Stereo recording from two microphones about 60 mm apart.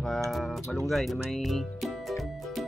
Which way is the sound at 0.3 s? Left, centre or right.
Centre.